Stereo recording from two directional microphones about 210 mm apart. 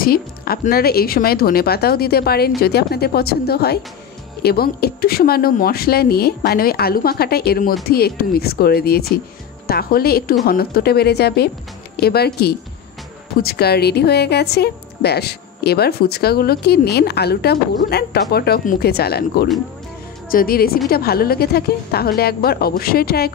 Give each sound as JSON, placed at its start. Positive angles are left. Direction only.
{"t": 0.0, "sound": "a woman's voice", "side_deg": 45}
{"t": 13.4, "sound": "a woman's voice", "side_deg": 50}